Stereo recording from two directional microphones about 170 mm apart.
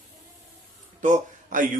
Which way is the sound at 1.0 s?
50° right (ahead or behind).